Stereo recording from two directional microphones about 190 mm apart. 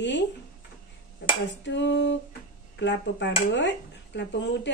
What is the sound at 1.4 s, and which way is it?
Speech, 70° left (ahead or behind).